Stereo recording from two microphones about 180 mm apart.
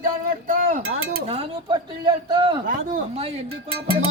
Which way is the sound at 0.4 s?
50° right (ahead or behind).